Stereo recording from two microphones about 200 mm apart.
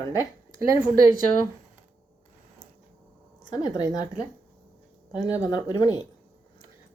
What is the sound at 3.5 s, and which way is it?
Speech, 20° left (ahead or behind).